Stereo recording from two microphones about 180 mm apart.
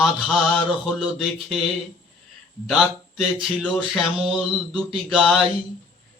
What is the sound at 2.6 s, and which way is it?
Speech, centre (ahead or behind).